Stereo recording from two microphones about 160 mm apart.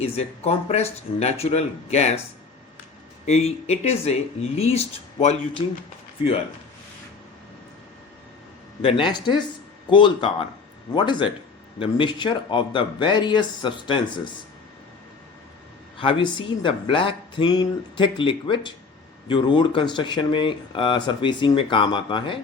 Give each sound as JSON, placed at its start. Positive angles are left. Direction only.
{"t": 0.0, "sound": "speech", "side_deg": 40}
{"t": 3.2, "sound": "speech", "side_deg": 40}
{"t": 5.2, "sound": "speech", "side_deg": 45}
{"t": 8.8, "sound": "speech", "side_deg": 30}
{"t": 16.0, "sound": "speech", "side_deg": 30}